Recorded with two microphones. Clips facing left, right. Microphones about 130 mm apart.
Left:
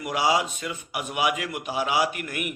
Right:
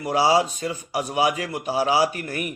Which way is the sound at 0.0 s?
35° right (ahead or behind).